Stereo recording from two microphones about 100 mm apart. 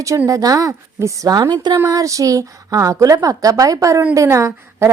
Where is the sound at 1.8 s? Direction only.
35° right (ahead or behind).